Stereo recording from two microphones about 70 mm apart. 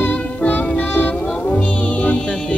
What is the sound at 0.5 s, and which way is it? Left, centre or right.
Music, left.